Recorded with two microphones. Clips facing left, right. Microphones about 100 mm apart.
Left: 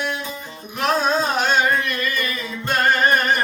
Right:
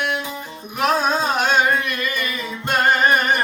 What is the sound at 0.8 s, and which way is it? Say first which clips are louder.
Music: right 1 dB; 5° right (ahead or behind).